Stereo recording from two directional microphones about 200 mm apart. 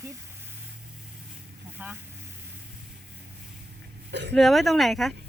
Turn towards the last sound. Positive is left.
turn(degrees=0)  # may be behind; listen again after turning